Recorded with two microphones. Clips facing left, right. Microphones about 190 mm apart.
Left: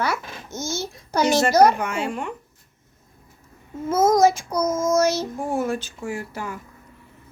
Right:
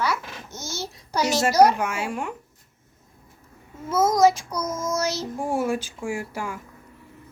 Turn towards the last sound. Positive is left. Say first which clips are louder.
# even
turn(degrees=-10)  # may be behind; listen again after turning